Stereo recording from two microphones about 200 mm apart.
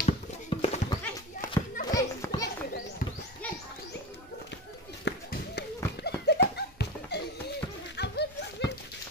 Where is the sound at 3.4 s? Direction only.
5° left (ahead or behind).